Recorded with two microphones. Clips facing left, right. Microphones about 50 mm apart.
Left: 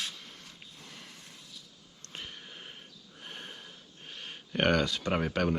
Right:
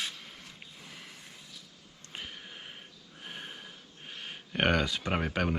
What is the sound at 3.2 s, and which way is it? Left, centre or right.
Snort, centre.